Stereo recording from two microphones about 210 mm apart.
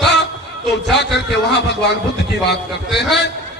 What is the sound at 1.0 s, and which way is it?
A man's voice, 55° left (ahead or behind).